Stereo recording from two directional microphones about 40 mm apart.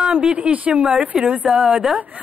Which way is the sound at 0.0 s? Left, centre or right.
Right.